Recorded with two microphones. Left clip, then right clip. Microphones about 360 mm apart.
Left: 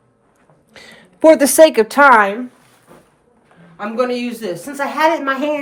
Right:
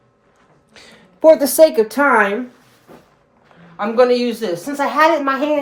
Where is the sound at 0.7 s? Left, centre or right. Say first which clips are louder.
Left 3 dB; left.